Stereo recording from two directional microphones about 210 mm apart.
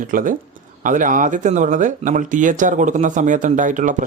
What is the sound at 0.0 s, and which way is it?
Speech, 40° right (ahead or behind).